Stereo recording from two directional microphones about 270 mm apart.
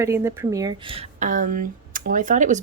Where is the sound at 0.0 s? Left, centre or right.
Centre.